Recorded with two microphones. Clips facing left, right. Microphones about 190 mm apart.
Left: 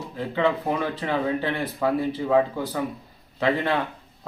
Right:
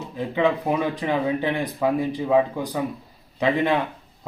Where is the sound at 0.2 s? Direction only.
15° right (ahead or behind).